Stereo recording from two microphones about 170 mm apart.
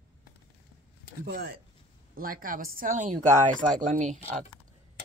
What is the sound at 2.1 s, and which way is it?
Speech, 60° right (ahead or behind).